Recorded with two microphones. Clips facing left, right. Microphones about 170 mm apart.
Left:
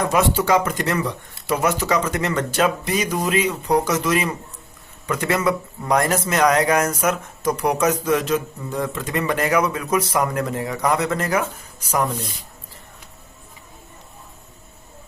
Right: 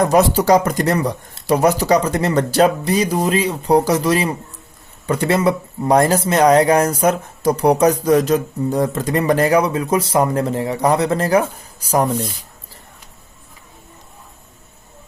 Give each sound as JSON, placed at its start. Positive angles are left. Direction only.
{"t": 0.0, "sound": "speech", "side_deg": -40}